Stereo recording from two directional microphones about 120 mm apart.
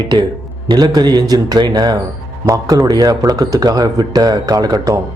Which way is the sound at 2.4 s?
25° right (ahead or behind).